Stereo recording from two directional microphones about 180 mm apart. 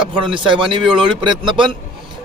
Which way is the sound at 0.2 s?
25° right (ahead or behind).